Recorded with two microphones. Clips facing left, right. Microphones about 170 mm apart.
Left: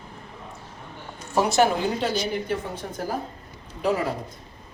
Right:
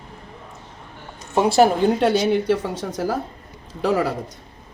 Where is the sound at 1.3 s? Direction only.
20° right (ahead or behind).